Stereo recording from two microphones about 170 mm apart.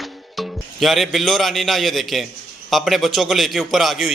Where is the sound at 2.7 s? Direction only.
Centre (ahead or behind).